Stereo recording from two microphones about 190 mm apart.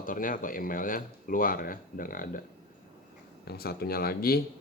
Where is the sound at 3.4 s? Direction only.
55° left (ahead or behind).